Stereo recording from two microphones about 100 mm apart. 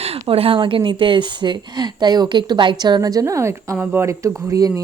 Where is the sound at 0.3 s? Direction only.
65° right (ahead or behind).